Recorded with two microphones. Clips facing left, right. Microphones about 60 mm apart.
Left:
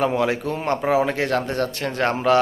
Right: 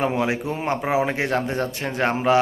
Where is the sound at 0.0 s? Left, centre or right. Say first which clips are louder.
Left 2 dB; centre.